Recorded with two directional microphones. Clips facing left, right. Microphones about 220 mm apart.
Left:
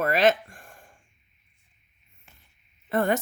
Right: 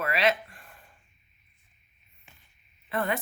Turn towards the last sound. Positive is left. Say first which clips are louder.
# left 6 dB
turn(degrees=45)  # may be behind; listen again after turning